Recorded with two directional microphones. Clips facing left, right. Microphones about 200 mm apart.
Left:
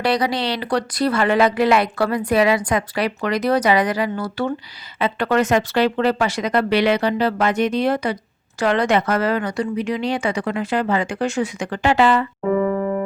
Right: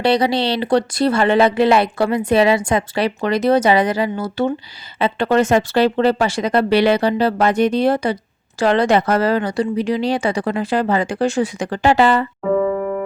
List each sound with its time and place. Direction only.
0.0 s speech: 25° right (ahead or behind)